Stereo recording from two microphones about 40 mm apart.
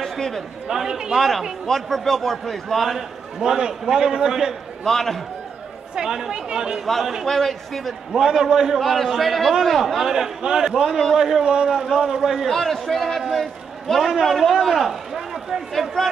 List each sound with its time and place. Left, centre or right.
0.0 s a sound: centre
0.7 s a man's voice: centre
1.1 s a man's voice: centre
4.8 s a man's voice: centre
5.9 s speech: centre
7.2 s a man's voice: centre
8.1 s a man's voice: centre
8.7 s a man's voice: centre
11.4 s speech: right
11.7 s a man's voice: centre
12.4 s a man's voice: centre